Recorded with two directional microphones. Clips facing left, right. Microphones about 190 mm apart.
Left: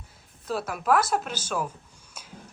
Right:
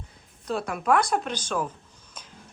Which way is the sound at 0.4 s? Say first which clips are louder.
Right 1 dB; 5° left (ahead or behind).